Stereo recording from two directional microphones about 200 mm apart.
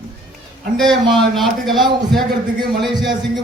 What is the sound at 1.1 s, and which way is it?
A man's voice, centre (ahead or behind).